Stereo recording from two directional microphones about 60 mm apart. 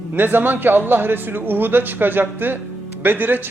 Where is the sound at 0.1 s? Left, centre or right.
Right.